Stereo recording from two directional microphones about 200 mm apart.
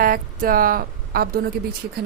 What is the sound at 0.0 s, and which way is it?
Speech, 45° right (ahead or behind).